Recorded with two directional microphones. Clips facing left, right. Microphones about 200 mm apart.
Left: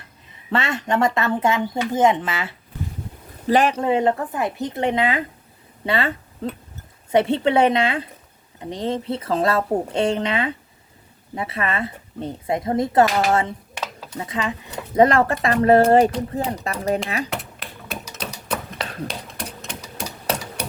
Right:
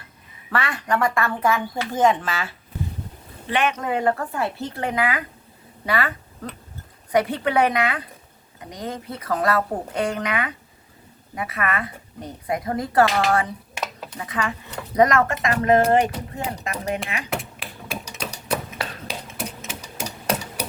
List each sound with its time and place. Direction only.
0.5 s speech: 25° left (ahead or behind)
3.4 s speech: 35° left (ahead or behind)
17.2 s typing: centre (ahead or behind)
18.1 s typewriter: 10° right (ahead or behind)